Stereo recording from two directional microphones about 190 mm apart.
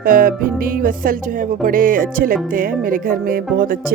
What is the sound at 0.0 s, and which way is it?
Music, 45° right (ahead or behind).